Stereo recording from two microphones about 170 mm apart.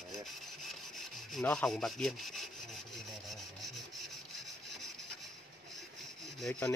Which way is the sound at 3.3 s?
Centre (ahead or behind).